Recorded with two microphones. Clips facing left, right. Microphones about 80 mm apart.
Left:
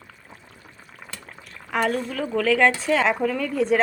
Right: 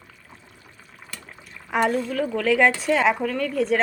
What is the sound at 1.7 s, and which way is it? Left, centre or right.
Speech, centre.